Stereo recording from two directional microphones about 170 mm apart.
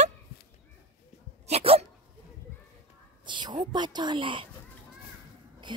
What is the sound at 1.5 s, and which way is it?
Dog, 35° right (ahead or behind).